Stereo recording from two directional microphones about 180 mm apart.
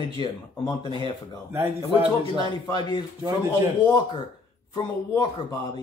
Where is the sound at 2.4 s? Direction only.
25° left (ahead or behind).